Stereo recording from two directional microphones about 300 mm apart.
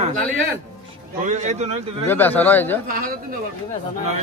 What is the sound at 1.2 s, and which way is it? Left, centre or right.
Speech, right.